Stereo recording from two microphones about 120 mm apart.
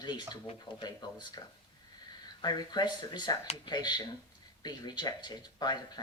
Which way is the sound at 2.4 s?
35° left (ahead or behind).